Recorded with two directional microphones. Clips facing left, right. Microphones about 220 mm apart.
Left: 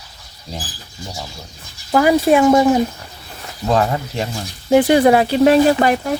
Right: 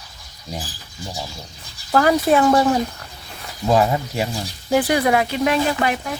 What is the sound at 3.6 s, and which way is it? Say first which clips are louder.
Speech: even; 10° right (ahead or behind).